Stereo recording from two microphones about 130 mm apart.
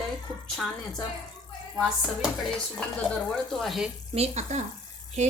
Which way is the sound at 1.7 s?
Centre (ahead or behind).